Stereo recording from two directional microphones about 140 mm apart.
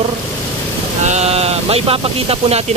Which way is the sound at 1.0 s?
50° right (ahead or behind).